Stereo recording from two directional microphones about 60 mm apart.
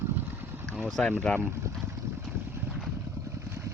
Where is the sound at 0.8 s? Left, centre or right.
Centre.